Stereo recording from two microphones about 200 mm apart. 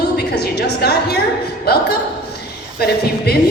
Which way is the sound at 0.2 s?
55° left (ahead or behind).